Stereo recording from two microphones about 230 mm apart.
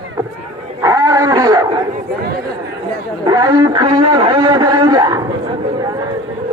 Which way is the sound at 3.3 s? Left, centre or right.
Centre.